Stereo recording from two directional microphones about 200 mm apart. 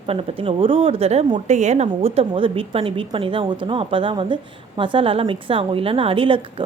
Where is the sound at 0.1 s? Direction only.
30° right (ahead or behind).